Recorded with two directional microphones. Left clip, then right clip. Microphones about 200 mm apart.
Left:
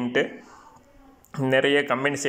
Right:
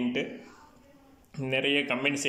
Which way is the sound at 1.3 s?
5° right (ahead or behind).